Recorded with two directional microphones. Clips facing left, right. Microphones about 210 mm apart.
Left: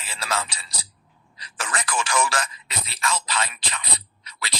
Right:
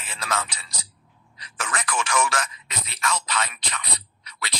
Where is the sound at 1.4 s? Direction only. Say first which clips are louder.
Even; 30° left (ahead or behind).